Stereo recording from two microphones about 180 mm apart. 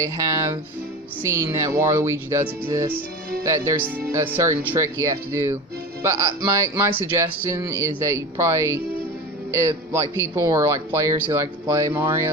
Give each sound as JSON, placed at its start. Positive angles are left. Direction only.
{"t": 0.0, "sound": "speech", "side_deg": -20}